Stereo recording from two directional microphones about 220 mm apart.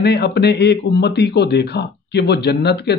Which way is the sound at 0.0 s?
50° left (ahead or behind).